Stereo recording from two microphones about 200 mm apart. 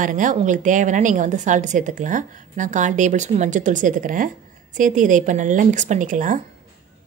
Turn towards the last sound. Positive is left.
turn(degrees=-40)  # may be behind; listen again after turning